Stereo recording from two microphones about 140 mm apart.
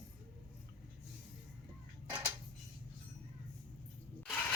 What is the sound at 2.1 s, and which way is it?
Tick-tock, 10° right (ahead or behind).